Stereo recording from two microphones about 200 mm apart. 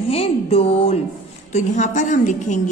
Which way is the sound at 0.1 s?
30° left (ahead or behind).